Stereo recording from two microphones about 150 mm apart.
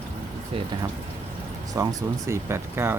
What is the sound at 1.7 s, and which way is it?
Speech, 25° right (ahead or behind).